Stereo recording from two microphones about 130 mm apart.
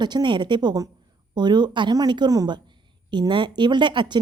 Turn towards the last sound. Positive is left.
turn(degrees=-35)  # may be behind; listen again after turning